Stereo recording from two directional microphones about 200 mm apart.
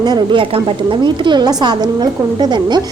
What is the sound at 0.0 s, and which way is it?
A woman's voice, 20° right (ahead or behind).